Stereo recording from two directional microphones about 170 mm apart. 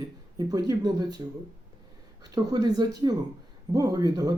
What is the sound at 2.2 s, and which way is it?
Speech, 20° right (ahead or behind).